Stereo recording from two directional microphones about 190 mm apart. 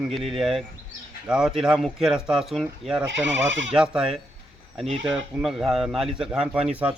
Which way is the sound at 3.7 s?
5° right (ahead or behind).